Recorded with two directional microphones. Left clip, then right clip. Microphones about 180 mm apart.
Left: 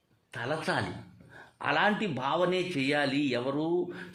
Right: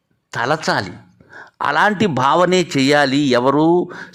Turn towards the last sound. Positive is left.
turn(degrees=-55)  # may be behind; listen again after turning